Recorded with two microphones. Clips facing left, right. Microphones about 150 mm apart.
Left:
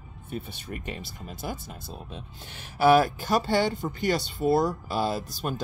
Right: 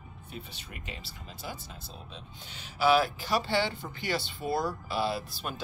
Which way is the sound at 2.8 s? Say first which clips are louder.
Left 5 dB; 50° left (ahead or behind).